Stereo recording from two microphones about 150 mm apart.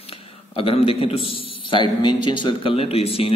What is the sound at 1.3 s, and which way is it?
Speech, 35° left (ahead or behind).